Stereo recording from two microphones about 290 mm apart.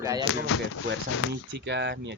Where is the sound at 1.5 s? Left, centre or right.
Right.